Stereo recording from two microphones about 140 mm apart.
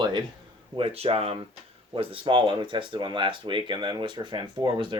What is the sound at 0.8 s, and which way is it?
Speech, 45° right (ahead or behind).